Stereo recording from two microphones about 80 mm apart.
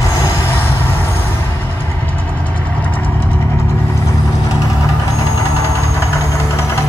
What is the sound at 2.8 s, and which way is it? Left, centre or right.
Vehicle, left.